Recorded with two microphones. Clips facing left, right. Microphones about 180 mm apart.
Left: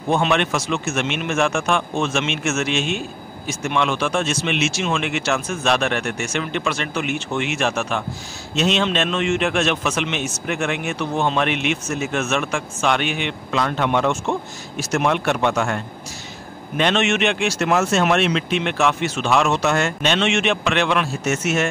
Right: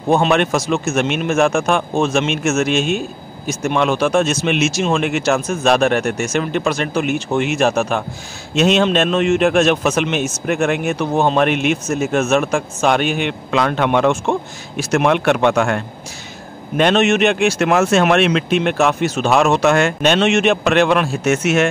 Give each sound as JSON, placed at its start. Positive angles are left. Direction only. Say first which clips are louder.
{"t": 0.1, "sound": "speech", "louder": "right 5 dB", "side_deg": -40}
{"t": 13.5, "sound": "speech", "louder": "right 4 dB", "side_deg": -70}
{"t": 16.7, "sound": "speech", "louder": "right 5 dB", "side_deg": -45}
{"t": 21.2, "sound": "speech", "louder": "right 5 dB", "side_deg": -65}